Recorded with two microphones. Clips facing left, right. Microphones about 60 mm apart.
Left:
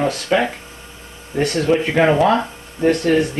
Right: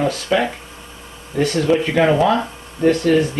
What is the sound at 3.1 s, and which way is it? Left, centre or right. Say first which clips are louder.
Speech: even; left.